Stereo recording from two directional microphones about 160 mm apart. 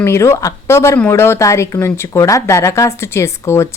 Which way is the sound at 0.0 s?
15° left (ahead or behind).